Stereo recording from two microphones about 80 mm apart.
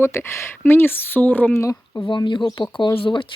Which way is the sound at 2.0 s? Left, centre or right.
Left.